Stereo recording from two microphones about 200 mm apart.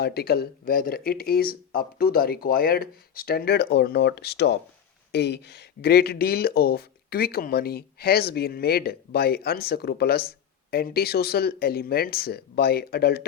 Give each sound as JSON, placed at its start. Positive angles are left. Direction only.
{"t": 0.0, "sound": "speech", "side_deg": 55}